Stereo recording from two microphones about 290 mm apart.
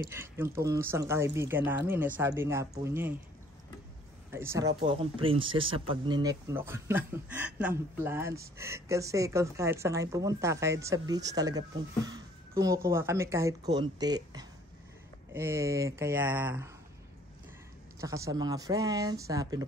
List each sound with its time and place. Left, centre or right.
0.1 s speech: centre
4.3 s speech: centre
18.0 s speech: centre